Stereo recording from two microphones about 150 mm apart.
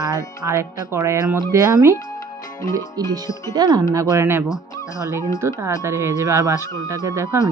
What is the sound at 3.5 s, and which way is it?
Speech, 25° right (ahead or behind).